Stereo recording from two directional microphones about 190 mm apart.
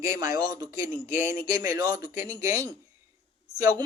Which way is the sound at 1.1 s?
45° left (ahead or behind).